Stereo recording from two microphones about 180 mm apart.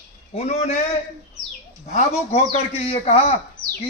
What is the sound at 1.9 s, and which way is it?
A man's voice, 40° left (ahead or behind).